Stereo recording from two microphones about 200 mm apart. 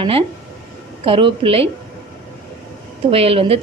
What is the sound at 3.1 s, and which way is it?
Speech, 30° right (ahead or behind).